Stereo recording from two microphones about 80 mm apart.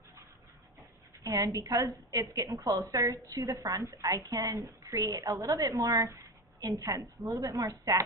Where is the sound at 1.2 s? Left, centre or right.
Right.